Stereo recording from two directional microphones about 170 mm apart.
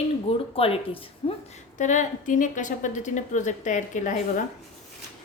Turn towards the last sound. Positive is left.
turn(degrees=45)  # may be behind; listen again after turning